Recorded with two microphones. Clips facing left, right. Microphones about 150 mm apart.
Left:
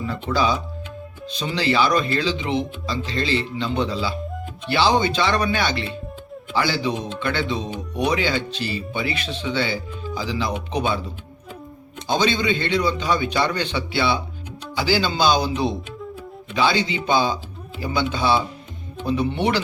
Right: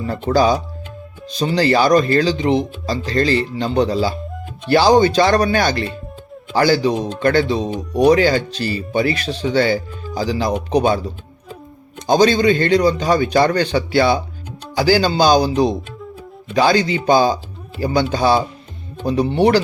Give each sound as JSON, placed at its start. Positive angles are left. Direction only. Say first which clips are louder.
{"t": 0.0, "sound": "a man's voice", "louder": "right 6 dB", "side_deg": -45}
{"t": 12.0, "sound": "a man's voice", "louder": "right 8 dB", "side_deg": -40}